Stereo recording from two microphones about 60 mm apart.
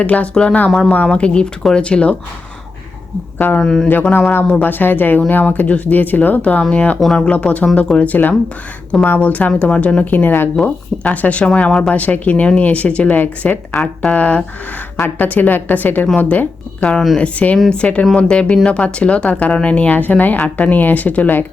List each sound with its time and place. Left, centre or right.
0.0 s a woman's voice: left
3.3 s speech: left
3.6 s speech: centre
3.8 s a woman's voice: left
7.0 s speech: centre
7.3 s a woman's voice: left
13.7 s speech: centre
14.2 s a woman's voice: left